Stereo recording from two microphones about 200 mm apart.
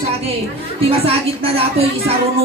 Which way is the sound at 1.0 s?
30° right (ahead or behind).